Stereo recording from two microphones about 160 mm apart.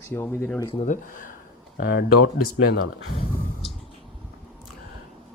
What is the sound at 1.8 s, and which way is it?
Speech, 90° left.